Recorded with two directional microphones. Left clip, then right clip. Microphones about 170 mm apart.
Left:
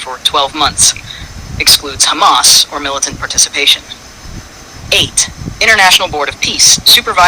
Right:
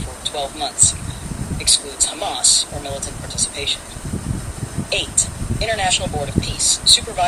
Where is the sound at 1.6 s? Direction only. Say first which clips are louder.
Left 10 dB; 55° left (ahead or behind).